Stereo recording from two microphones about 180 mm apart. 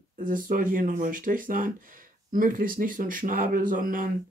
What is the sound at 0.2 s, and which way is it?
Speech, 50° right (ahead or behind).